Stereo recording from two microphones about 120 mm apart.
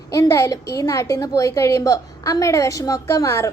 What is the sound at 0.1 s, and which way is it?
A woman's voice, 25° left (ahead or behind).